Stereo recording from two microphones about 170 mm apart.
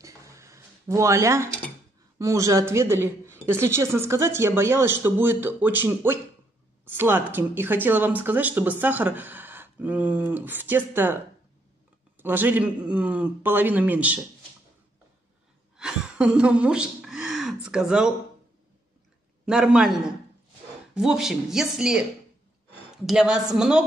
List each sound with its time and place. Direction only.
0.0 s a sound: 15° right (ahead or behind)
2.1 s speech: 20° right (ahead or behind)
12.2 s speech: 10° right (ahead or behind)
15.8 s speech: 5° right (ahead or behind)
19.4 s speech: 5° right (ahead or behind)
23.0 s speech: 5° right (ahead or behind)